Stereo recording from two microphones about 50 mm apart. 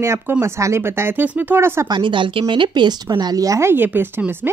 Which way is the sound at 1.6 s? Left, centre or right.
Right.